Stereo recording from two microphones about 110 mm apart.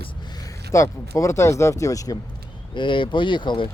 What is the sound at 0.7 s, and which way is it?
Speech, 25° left (ahead or behind).